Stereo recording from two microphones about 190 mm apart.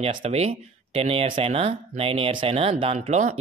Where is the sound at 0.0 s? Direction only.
35° right (ahead or behind).